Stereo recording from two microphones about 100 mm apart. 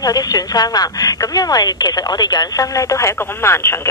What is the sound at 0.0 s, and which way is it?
A woman's voice, 40° left (ahead or behind).